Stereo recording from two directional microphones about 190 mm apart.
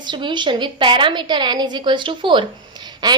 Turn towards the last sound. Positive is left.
turn(degrees=-20)  # may be behind; listen again after turning